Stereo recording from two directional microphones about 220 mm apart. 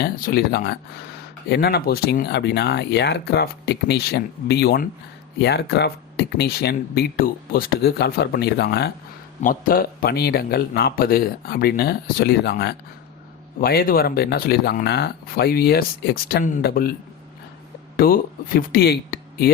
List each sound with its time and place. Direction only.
0.0 s speech: 45° left (ahead or behind)
17.9 s speech: 40° left (ahead or behind)